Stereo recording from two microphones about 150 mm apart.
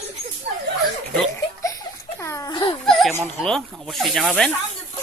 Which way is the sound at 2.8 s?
Centre (ahead or behind).